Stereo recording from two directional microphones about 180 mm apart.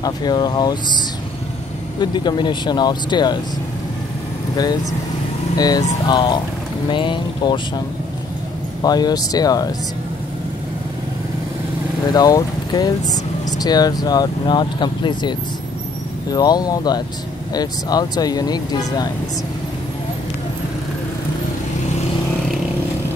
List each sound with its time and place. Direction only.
0.0 s speech: 25° left (ahead or behind)
5.6 s speech: 20° left (ahead or behind)
8.8 s speech: 20° left (ahead or behind)
12.1 s speech: 20° left (ahead or behind)